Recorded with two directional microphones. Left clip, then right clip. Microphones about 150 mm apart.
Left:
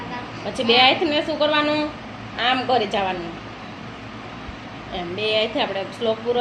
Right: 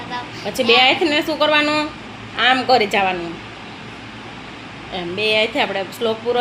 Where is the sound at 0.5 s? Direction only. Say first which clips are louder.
Right 2 dB; 60° right (ahead or behind).